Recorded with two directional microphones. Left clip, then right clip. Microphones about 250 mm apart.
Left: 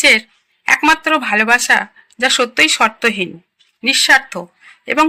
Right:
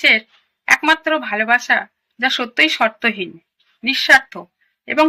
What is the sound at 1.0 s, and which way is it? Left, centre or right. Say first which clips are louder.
Speech: left 4 dB; left.